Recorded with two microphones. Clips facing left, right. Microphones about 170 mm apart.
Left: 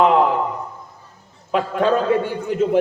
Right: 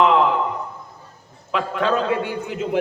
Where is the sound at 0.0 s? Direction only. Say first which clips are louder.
Left 2 dB; 45° left (ahead or behind).